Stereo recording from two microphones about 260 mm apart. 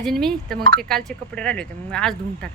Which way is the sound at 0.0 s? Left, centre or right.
Centre.